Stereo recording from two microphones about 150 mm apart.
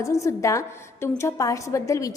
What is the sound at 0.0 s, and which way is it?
A woman's voice, 20° left (ahead or behind).